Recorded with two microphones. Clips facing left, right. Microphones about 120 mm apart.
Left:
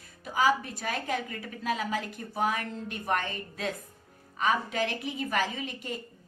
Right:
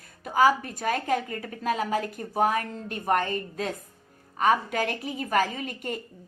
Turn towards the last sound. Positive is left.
turn(degrees=-50)  # may be behind; listen again after turning